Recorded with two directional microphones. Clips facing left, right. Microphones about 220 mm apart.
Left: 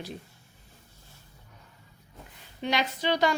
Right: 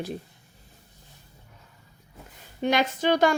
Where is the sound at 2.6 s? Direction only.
50° right (ahead or behind).